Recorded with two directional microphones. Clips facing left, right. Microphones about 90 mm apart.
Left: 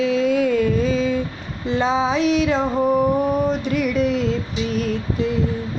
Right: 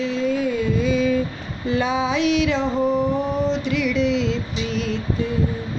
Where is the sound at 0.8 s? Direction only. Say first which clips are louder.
Even; 30° left (ahead or behind).